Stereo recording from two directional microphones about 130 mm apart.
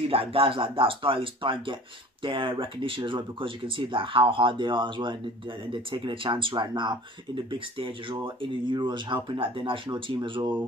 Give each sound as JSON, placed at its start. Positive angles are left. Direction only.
{"t": 0.1, "sound": "speech", "side_deg": -45}